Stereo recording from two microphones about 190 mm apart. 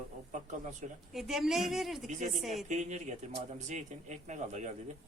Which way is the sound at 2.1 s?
40° right (ahead or behind).